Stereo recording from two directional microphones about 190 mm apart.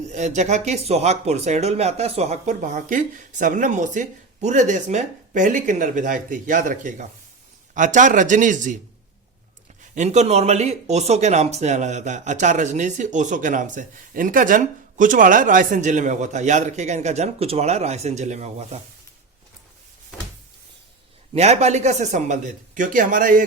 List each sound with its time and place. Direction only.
0.1 s speech: 40° right (ahead or behind)
9.8 s speech: 40° right (ahead or behind)
21.3 s speech: 35° right (ahead or behind)